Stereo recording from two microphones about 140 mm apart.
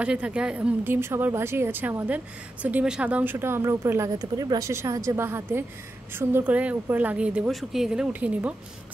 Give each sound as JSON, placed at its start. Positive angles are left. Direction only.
{"t": 0.0, "sound": "a woman's voice", "side_deg": -10}